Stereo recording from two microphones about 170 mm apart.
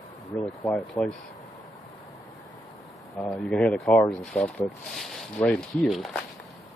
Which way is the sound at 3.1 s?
20° left (ahead or behind).